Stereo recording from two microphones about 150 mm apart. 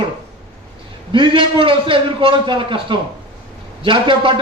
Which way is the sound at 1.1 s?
35° right (ahead or behind).